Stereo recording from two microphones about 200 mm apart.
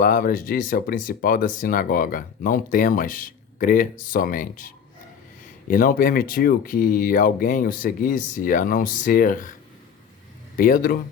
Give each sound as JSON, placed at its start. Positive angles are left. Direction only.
{"t": 0.0, "sound": "speech", "side_deg": 40}
{"t": 10.6, "sound": "speech", "side_deg": 45}